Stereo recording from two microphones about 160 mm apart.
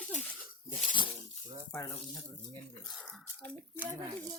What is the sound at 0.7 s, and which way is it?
Speech, 55° left (ahead or behind).